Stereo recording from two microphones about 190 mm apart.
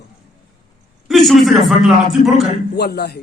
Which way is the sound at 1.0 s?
Centre (ahead or behind).